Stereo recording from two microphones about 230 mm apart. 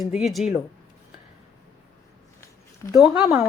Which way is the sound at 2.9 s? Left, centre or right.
Centre.